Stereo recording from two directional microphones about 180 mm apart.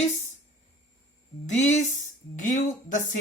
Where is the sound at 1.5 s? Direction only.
40° left (ahead or behind).